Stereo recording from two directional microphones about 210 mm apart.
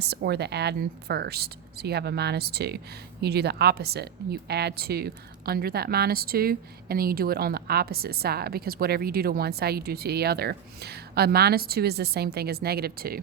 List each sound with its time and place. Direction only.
0.0 s a woman's voice: 50° right (ahead or behind)